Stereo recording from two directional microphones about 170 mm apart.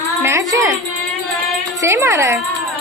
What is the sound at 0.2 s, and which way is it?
Music, 15° right (ahead or behind).